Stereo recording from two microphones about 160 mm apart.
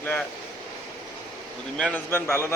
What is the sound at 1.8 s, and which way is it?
Speech, 10° left (ahead or behind).